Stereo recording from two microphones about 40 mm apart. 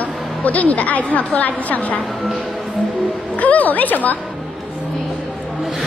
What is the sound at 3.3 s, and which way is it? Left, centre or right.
Speech, left.